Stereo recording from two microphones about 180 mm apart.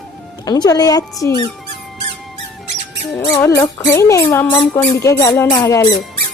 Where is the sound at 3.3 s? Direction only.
15° left (ahead or behind).